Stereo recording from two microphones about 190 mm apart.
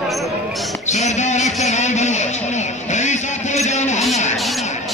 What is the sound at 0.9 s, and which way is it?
Music, 35° left (ahead or behind).